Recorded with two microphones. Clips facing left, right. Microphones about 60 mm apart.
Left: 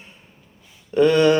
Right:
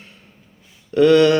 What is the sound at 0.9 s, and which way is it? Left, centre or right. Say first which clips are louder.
Speech: right 3 dB; centre.